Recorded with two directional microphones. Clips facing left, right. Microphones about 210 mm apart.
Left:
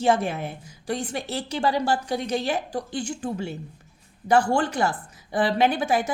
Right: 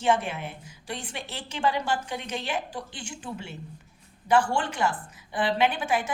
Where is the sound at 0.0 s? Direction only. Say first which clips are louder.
Left 3 dB; 40° left (ahead or behind).